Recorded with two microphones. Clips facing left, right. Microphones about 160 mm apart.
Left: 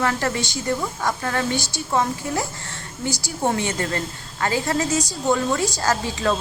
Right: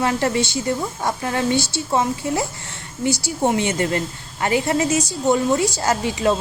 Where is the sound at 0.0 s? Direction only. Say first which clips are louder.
Right 3 dB; 20° right (ahead or behind).